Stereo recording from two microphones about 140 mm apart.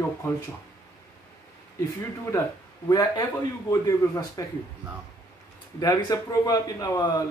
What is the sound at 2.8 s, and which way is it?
A man's voice, 30° left (ahead or behind).